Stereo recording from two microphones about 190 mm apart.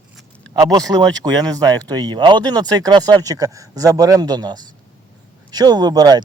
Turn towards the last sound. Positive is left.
turn(degrees=-20)  # may be behind; listen again after turning